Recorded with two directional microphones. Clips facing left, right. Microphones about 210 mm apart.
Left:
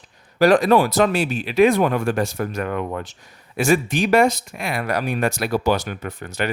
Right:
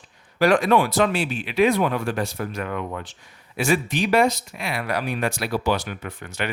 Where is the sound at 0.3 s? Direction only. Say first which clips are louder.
Left 3 dB; 40° left (ahead or behind).